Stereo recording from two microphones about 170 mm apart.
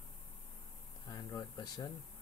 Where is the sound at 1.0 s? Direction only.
20° left (ahead or behind).